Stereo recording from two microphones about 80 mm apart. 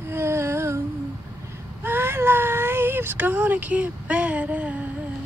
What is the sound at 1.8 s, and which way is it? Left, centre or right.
Speech, right.